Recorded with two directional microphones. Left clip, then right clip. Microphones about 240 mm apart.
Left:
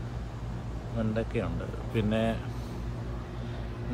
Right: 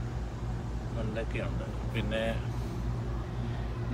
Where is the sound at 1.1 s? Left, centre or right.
Left.